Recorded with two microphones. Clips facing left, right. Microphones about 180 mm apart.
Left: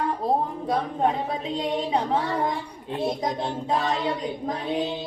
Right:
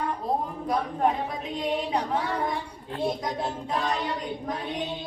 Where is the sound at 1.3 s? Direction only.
25° left (ahead or behind).